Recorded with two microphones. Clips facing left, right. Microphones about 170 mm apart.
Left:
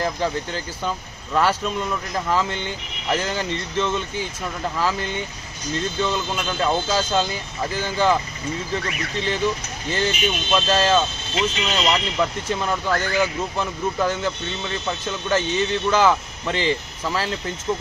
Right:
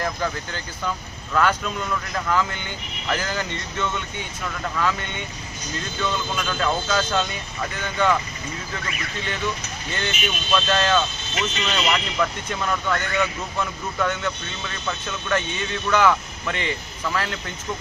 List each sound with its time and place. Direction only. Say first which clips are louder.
0.0 s speech: left 3 dB; 30° left (ahead or behind)
9.2 s speech: left 5 dB; 30° left (ahead or behind)